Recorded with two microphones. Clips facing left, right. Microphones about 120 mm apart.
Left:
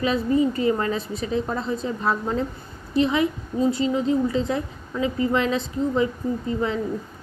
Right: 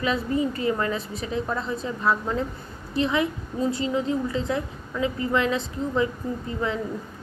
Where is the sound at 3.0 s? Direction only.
25° left (ahead or behind).